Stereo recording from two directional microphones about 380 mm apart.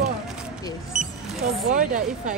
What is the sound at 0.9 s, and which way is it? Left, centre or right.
Vehicle, centre.